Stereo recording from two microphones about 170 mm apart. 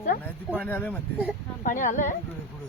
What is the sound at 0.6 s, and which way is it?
Speech, 10° left (ahead or behind).